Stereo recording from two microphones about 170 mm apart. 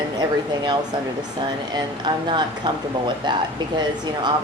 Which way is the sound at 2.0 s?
25° right (ahead or behind).